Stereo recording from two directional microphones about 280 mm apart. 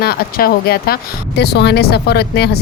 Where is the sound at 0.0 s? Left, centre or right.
Left.